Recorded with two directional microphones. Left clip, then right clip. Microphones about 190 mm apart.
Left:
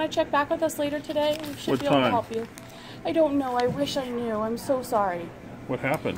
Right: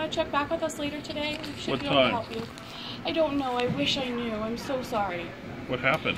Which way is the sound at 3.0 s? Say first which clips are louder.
Left 4 dB; 50° left (ahead or behind).